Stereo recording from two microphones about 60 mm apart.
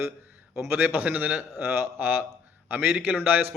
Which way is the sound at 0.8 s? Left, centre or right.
Right.